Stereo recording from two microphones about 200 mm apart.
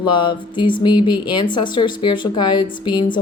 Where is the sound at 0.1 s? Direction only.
25° left (ahead or behind).